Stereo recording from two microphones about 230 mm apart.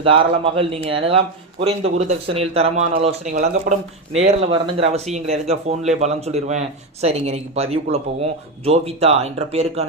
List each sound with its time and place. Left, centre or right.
0.0 s speech: right